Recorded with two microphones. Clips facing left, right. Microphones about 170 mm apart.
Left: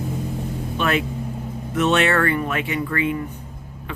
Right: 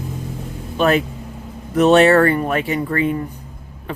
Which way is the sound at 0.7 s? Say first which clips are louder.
Right 6 dB; 35° right (ahead or behind).